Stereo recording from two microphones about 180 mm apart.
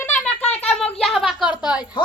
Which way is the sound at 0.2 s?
5° left (ahead or behind).